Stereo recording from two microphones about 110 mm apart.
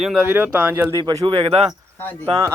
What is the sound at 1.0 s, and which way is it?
Speech, 30° right (ahead or behind).